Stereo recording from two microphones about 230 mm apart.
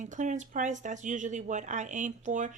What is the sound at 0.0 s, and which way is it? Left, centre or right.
Speech, right.